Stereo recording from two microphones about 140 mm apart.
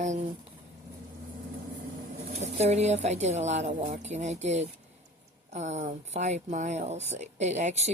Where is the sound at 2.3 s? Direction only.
50° right (ahead or behind).